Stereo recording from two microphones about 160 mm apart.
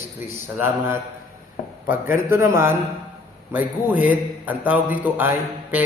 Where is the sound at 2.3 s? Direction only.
15° right (ahead or behind).